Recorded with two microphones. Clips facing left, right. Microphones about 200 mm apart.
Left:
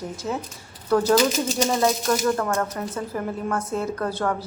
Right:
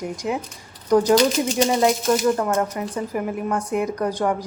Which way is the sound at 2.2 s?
15° right (ahead or behind).